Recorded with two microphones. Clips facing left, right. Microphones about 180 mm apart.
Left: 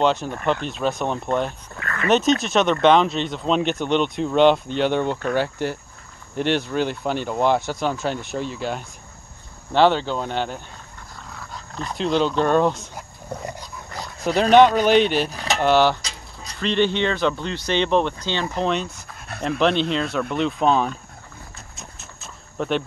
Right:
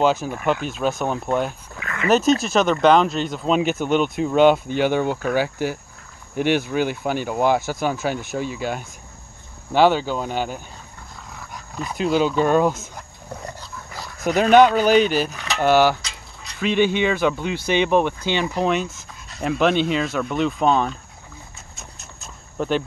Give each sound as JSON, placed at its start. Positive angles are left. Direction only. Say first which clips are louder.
{"t": 0.0, "sound": "speech", "louder": "right 1 dB", "side_deg": -5}
{"t": 12.9, "sound": "roaring cats", "louder": "left 3 dB", "side_deg": 15}
{"t": 14.2, "sound": "speech", "louder": "even", "side_deg": -5}
{"t": 19.1, "sound": "dog", "louder": "left 6 dB", "side_deg": 60}
{"t": 19.6, "sound": "speech", "louder": "right 1 dB", "side_deg": -5}
{"t": 21.7, "sound": "a sound", "louder": "left 1 dB", "side_deg": 0}